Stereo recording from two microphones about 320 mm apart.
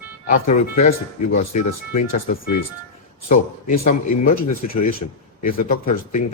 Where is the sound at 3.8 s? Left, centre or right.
Left.